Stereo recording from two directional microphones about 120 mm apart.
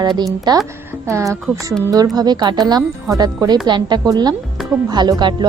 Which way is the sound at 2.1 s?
35° right (ahead or behind).